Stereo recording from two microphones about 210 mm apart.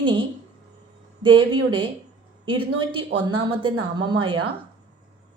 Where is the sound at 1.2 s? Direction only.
25° right (ahead or behind).